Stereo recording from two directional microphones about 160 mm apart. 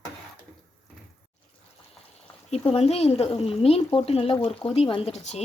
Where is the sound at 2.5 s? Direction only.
40° left (ahead or behind).